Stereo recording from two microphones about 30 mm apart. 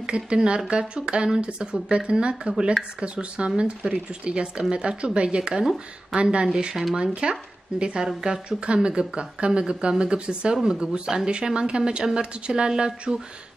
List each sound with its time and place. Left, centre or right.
0.0 s speech: right
6.7 s speech: centre
7.0 s speech: right
10.6 s speech: right